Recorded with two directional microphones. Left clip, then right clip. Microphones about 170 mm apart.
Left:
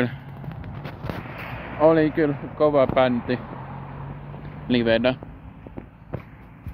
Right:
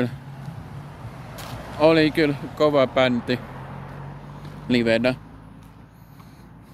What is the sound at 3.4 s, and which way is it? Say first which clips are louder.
Vehicle: left 1 dB; 35° left (ahead or behind).